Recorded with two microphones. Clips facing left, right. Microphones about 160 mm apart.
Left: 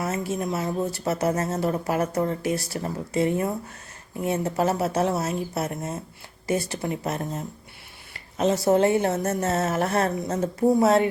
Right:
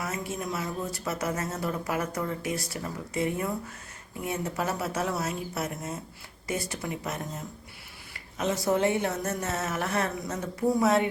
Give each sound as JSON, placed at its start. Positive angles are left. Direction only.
{"t": 0.0, "sound": "speech", "side_deg": 25}
{"t": 8.4, "sound": "speech", "side_deg": 30}